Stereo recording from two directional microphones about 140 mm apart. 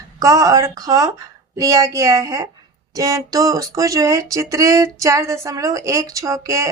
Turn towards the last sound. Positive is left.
turn(degrees=-25)  # may be behind; listen again after turning